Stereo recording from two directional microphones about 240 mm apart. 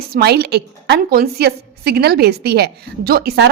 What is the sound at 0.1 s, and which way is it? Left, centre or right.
A woman's voice, right.